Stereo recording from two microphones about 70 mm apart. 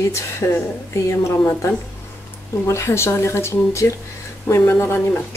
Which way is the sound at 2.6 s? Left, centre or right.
Left.